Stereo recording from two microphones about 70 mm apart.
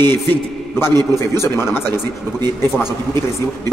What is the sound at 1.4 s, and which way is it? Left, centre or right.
Speech, left.